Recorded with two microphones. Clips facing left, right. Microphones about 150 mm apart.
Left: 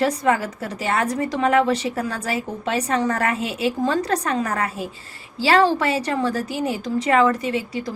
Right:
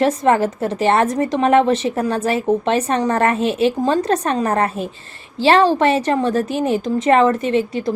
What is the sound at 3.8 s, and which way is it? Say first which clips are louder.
A woman's voice: right 4 dB; 20° right (ahead or behind).